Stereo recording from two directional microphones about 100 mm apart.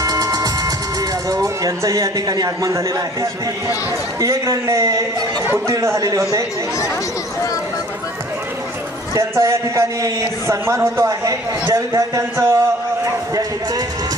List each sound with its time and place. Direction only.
0.0 s music: 35° right (ahead or behind)
1.3 s a man's voice: 35° right (ahead or behind)
9.1 s a man's voice: 30° right (ahead or behind)